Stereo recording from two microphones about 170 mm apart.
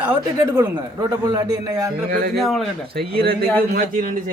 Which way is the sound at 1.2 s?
20° right (ahead or behind).